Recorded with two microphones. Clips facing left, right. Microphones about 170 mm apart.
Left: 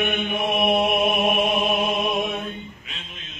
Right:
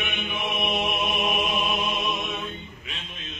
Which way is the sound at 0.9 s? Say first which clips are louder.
Left 6 dB; 55° left (ahead or behind).